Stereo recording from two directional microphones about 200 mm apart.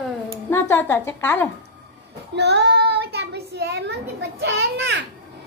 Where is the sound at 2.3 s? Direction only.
60° right (ahead or behind).